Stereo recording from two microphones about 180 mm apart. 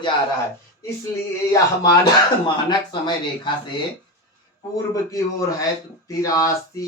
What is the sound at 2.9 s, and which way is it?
Speech, 25° left (ahead or behind).